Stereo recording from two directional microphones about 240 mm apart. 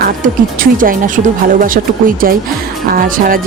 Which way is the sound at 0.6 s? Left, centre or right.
Right.